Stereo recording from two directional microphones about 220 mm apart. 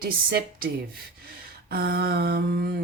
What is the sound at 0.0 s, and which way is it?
Speech, 45° right (ahead or behind).